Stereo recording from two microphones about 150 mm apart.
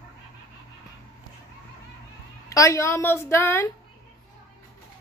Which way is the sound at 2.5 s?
20° left (ahead or behind).